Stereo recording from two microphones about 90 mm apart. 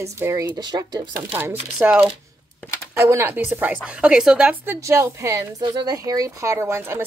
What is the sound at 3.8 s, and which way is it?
Speech, 10° right (ahead or behind).